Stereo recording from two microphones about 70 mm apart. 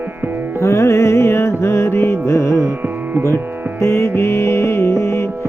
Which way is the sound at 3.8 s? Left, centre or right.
Left.